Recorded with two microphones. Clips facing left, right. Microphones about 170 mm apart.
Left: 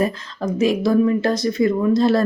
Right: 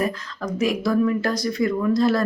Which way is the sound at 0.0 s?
25° left (ahead or behind).